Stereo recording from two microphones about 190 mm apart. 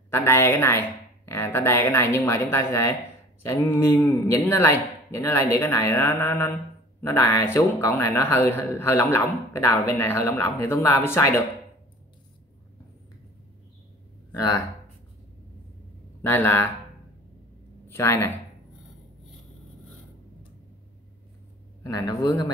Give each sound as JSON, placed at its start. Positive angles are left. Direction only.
{"t": 0.1, "sound": "a man's voice", "side_deg": 15}
{"t": 16.2, "sound": "a man's voice", "side_deg": 10}
{"t": 17.8, "sound": "speech", "side_deg": 15}
{"t": 21.8, "sound": "speech", "side_deg": 20}